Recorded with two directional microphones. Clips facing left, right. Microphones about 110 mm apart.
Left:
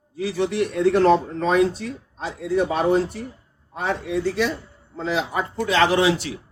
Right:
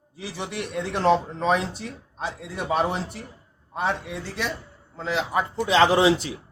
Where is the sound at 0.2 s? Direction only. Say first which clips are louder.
Left 10 dB; 10° right (ahead or behind).